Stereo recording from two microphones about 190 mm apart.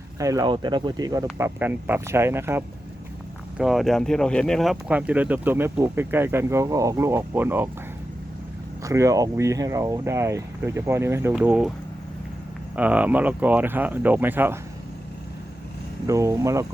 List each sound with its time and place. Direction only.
0.2 s speech: 20° right (ahead or behind)
3.6 s speech: centre (ahead or behind)
8.8 s speech: 15° right (ahead or behind)
12.7 s speech: 10° right (ahead or behind)
16.0 s speech: 15° right (ahead or behind)